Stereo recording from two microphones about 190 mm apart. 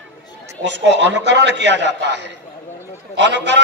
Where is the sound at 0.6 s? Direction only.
70° right (ahead or behind).